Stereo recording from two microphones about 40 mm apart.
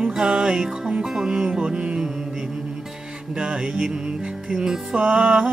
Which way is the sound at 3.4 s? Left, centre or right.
Centre.